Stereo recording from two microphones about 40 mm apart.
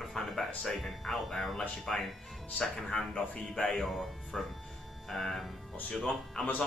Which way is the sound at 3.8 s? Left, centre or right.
Centre.